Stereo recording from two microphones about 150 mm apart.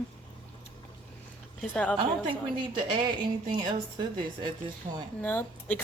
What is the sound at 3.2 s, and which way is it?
A woman's voice, 30° right (ahead or behind).